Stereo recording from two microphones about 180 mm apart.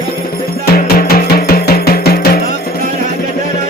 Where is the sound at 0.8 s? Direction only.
55° left (ahead or behind).